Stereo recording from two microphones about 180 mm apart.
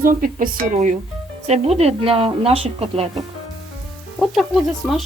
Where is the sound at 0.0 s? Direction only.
50° right (ahead or behind); by 3.1 s 35° right (ahead or behind).